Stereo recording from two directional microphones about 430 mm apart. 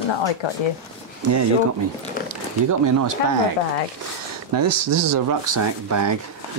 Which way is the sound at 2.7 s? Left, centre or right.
Right.